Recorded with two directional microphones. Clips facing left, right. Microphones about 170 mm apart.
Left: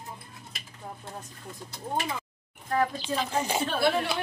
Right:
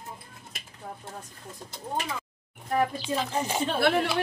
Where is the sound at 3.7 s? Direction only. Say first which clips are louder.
Right 2 dB; 60° right (ahead or behind).